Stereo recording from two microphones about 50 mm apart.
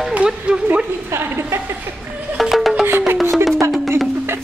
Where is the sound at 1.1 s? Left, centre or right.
Right.